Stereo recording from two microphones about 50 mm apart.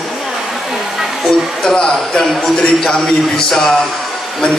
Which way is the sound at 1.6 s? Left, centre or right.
Centre.